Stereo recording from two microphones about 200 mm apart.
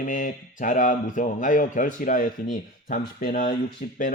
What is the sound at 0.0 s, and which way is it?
Speech, 40° left (ahead or behind).